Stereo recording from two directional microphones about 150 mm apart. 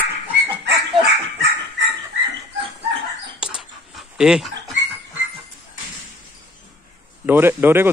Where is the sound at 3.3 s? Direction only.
5° right (ahead or behind).